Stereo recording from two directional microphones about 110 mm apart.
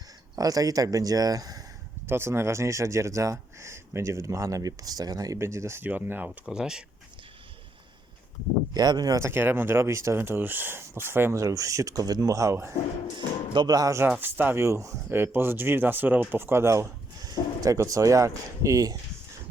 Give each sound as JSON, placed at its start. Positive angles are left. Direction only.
{"t": 0.3, "sound": "speech", "side_deg": -35}
{"t": 2.0, "sound": "speech", "side_deg": -20}
{"t": 8.7, "sound": "speech", "side_deg": -40}
{"t": 13.1, "sound": "speech", "side_deg": -45}
{"t": 14.2, "sound": "speech", "side_deg": -20}